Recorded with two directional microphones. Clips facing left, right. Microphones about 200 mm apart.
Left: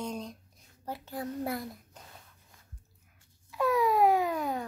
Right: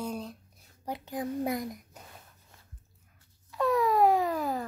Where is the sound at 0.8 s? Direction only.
15° right (ahead or behind).